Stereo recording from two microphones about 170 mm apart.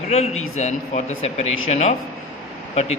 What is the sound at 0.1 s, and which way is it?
A man's voice, 40° left (ahead or behind).